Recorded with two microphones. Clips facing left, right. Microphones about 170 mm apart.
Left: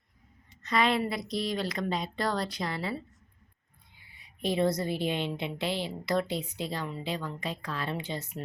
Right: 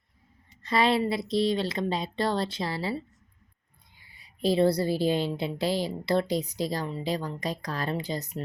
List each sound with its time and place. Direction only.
0.6 s speech: 30° right (ahead or behind)
4.1 s a woman's voice: 35° right (ahead or behind)